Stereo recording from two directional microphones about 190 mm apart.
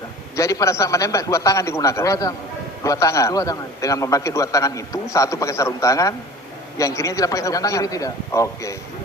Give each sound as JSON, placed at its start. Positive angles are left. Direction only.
{"t": 0.3, "sound": "a man's voice", "side_deg": 15}